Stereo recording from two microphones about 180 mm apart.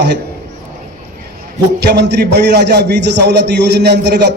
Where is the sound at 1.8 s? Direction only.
65° right (ahead or behind).